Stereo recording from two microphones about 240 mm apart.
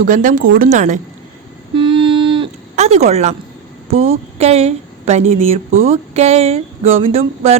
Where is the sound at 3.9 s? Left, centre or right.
Right.